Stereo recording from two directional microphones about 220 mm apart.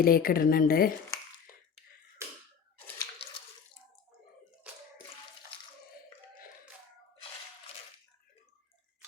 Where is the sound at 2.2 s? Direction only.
10° right (ahead or behind).